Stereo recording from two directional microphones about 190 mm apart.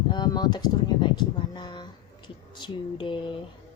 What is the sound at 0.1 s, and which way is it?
Speech, 20° left (ahead or behind).